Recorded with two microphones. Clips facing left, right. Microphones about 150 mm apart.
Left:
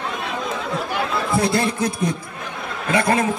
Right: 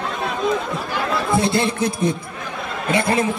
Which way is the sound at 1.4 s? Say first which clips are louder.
Right 1 dB; 25° right (ahead or behind).